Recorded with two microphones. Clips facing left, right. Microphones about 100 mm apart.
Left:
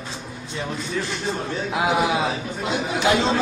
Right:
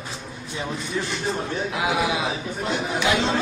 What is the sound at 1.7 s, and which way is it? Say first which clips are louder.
Speech: left 4 dB; 20° left (ahead or behind).